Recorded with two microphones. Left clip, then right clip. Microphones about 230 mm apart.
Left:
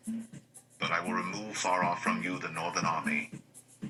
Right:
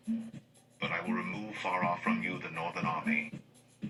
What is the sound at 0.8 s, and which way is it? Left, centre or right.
Speech, left.